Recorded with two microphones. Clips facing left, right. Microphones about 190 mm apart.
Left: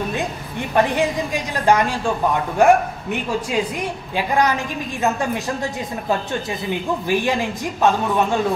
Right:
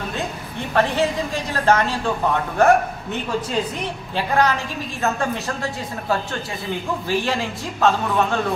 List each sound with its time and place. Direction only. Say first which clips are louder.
0.1 s a woman's voice: left 3 dB; 15° left (ahead or behind)